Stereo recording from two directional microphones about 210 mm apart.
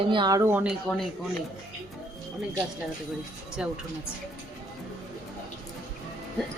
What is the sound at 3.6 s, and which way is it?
Speech, 5° right (ahead or behind).